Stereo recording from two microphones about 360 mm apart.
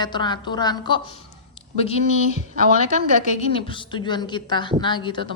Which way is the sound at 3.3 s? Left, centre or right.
Centre.